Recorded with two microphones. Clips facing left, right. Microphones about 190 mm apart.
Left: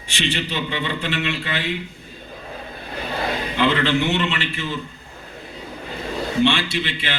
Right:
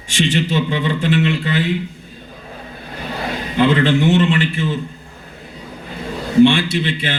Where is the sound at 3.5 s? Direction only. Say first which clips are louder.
Right 6 dB; 45° right (ahead or behind).